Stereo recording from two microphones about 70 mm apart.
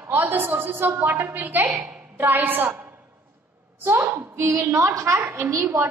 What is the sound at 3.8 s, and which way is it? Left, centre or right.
A woman's voice, right.